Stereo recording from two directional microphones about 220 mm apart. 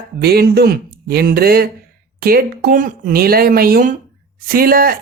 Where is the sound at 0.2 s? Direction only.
45° right (ahead or behind).